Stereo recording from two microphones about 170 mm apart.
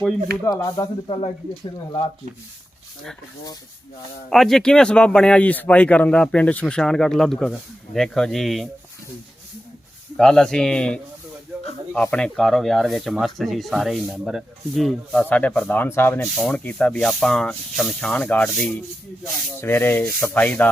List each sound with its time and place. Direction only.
0.4 s speech: 20° left (ahead or behind)
4.3 s speech: centre (ahead or behind)
10.2 s speech: 5° left (ahead or behind)
12.1 s speech: 5° left (ahead or behind)
19.5 s rub: 15° left (ahead or behind)